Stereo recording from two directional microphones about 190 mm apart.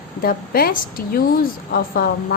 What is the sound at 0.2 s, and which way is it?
A woman's voice, 50° left (ahead or behind).